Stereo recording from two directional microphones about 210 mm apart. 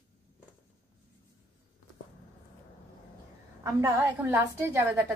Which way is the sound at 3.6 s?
15° right (ahead or behind).